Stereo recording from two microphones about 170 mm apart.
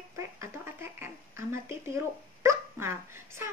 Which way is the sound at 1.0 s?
15° right (ahead or behind).